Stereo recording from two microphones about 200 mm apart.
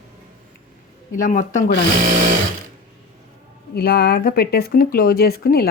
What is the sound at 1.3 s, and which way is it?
Speech, 40° left (ahead or behind).